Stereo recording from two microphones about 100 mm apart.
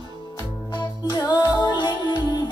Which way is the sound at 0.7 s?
45° left (ahead or behind).